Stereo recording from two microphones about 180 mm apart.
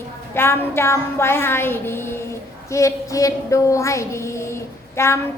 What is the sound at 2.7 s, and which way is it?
A woman's voice, 15° left (ahead or behind).